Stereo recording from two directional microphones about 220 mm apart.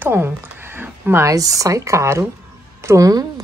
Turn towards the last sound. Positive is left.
turn(degrees=-15)  # may be behind; listen again after turning